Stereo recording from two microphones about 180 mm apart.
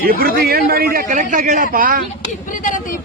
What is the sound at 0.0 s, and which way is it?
A man's voice, 55° right (ahead or behind).